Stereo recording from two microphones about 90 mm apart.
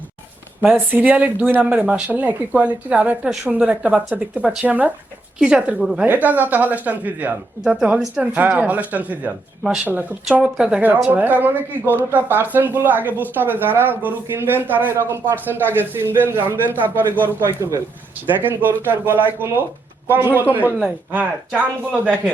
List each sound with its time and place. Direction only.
0.6 s speech: 15° right (ahead or behind)
6.1 s speech: 20° right (ahead or behind)
18.3 s speech: 20° right (ahead or behind)